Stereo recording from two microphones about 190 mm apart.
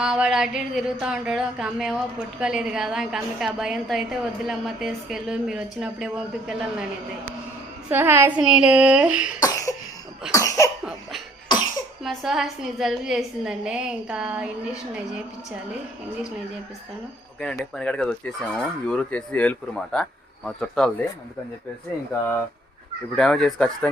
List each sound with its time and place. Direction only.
0.0 s a sound: 5° right (ahead or behind)
1.0 s a woman's voice: 5° right (ahead or behind)
7.9 s a child's voice: 10° right (ahead or behind)
9.4 s cough: 20° left (ahead or behind)
12.0 s a woman's voice: centre (ahead or behind)
17.4 s a woman's voice: 5° left (ahead or behind)
23.1 s a woman's voice: 5° left (ahead or behind)